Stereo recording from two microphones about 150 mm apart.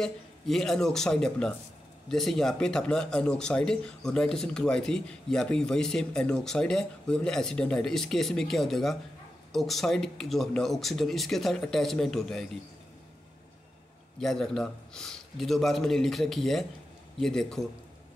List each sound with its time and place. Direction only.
0.0 s speech: 5° left (ahead or behind)
14.2 s speech: centre (ahead or behind)